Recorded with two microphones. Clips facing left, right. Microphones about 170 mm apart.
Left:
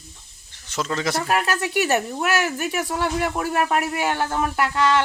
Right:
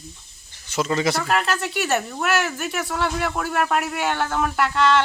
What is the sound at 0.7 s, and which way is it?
Speech, 5° right (ahead or behind).